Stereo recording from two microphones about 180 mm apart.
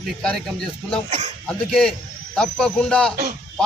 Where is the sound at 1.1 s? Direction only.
40° right (ahead or behind).